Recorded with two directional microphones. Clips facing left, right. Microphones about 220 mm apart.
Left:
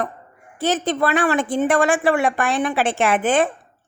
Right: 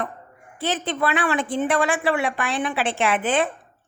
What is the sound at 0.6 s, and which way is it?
Speech, 45° left (ahead or behind).